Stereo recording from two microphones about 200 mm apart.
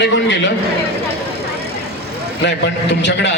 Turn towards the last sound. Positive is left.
turn(degrees=60)  # may be behind; listen again after turning